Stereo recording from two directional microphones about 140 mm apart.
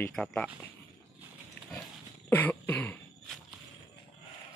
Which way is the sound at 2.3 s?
15° left (ahead or behind).